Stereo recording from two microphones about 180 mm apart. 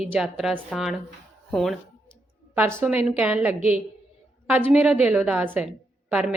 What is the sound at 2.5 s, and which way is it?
A woman's voice, 10° right (ahead or behind).